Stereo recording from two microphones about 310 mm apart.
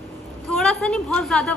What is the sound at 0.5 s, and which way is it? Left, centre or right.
Speech, centre.